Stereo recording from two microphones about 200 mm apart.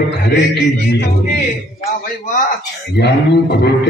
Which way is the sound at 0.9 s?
55° left (ahead or behind).